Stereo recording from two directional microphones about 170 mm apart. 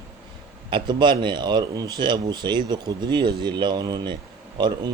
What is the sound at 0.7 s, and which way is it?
Speech, 25° right (ahead or behind).